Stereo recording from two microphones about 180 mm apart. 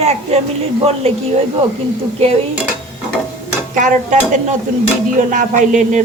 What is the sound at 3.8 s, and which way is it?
Speech, 40° right (ahead or behind).